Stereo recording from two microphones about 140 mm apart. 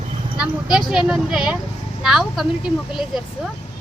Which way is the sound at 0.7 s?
5° right (ahead or behind).